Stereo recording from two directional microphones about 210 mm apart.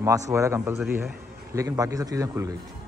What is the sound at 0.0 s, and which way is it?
A man's voice, 15° right (ahead or behind).